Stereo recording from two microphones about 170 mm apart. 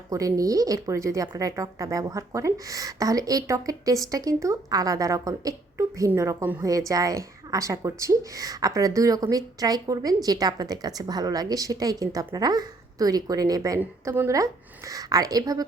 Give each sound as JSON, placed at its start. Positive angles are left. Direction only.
{"t": 0.1, "sound": "speech", "side_deg": -20}